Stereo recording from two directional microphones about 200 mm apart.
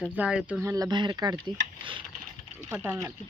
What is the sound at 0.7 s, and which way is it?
Speech, 20° right (ahead or behind).